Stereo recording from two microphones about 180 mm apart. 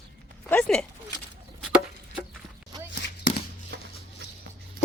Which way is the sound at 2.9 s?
65° left (ahead or behind).